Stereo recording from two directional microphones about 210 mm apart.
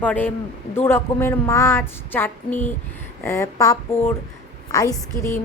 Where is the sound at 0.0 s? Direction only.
5° left (ahead or behind).